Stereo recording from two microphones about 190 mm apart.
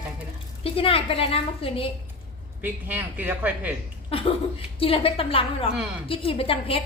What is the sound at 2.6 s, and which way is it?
Speech, 10° right (ahead or behind).